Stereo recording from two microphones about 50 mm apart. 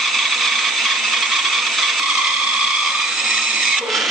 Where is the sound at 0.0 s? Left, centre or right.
Centre.